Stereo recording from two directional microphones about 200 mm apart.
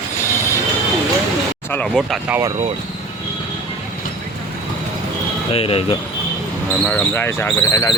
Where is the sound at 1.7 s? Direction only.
5° left (ahead or behind).